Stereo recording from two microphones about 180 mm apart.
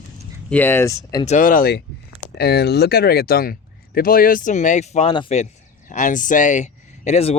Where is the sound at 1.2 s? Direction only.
45° left (ahead or behind).